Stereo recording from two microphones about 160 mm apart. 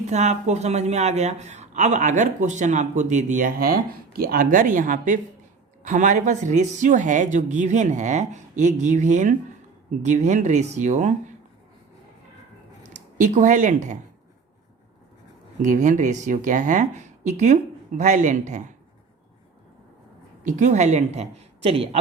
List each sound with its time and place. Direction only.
0.0 s speech: 45° right (ahead or behind)
12.9 s speech: 50° right (ahead or behind)
15.6 s speech: 50° right (ahead or behind)
20.4 s speech: 50° right (ahead or behind)